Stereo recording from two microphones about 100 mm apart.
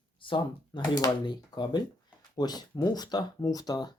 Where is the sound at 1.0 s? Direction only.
45° left (ahead or behind).